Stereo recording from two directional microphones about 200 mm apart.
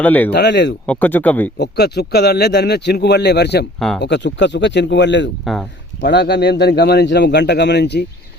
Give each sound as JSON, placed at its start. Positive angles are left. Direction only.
{"t": 0.0, "sound": "speech", "side_deg": 10}
{"t": 0.3, "sound": "speech", "side_deg": 55}
{"t": 0.9, "sound": "speech", "side_deg": 10}
{"t": 1.5, "sound": "speech", "side_deg": 55}
{"t": 3.8, "sound": "speech", "side_deg": 0}
{"t": 4.0, "sound": "speech", "side_deg": 60}